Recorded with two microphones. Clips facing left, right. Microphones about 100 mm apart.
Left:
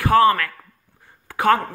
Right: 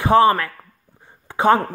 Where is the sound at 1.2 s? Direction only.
20° right (ahead or behind).